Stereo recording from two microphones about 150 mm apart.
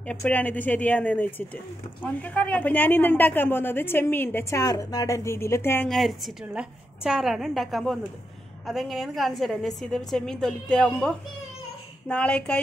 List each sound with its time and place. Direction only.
0.0 s a woman's voice: 5° left (ahead or behind)
5.9 s a woman's voice: centre (ahead or behind)